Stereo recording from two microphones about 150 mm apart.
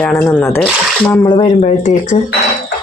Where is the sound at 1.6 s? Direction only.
55° left (ahead or behind).